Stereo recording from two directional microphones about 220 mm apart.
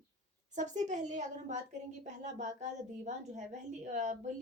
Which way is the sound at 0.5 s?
35° right (ahead or behind).